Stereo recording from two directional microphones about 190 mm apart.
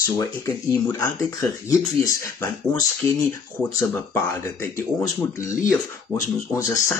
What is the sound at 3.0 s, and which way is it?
Speech, 25° right (ahead or behind).